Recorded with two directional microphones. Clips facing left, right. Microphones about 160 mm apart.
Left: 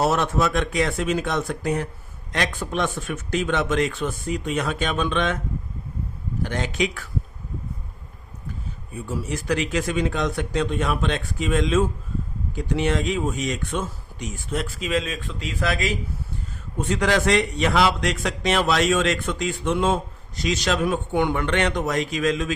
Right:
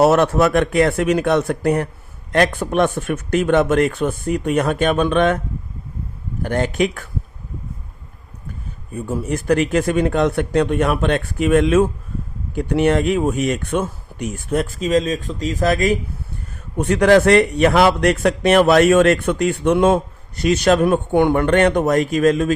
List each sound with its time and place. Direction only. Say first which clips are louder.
0.0 s a man's voice: right 8 dB; 60° right (ahead or behind)
6.4 s speech: right 6 dB; 50° right (ahead or behind)
8.9 s a man's voice: right 6 dB; 55° right (ahead or behind)
16.7 s a man's voice: right 9 dB; 65° right (ahead or behind)